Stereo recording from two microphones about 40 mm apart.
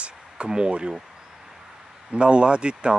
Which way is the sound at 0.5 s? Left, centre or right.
Right.